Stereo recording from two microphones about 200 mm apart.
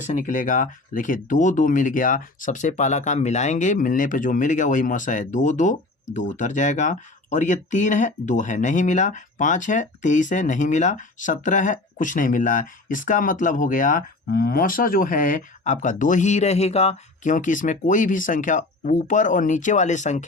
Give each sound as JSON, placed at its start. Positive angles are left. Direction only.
{"t": 0.1, "sound": "speech", "side_deg": 40}